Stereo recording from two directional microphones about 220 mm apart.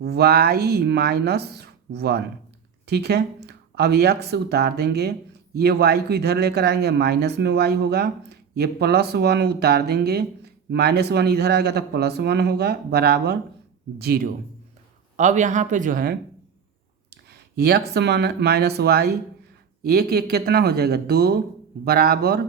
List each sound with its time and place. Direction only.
0.0 s speech: 45° right (ahead or behind)
17.6 s speech: 45° right (ahead or behind)